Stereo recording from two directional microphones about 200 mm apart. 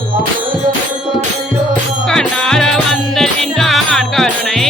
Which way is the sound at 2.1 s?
5° left (ahead or behind).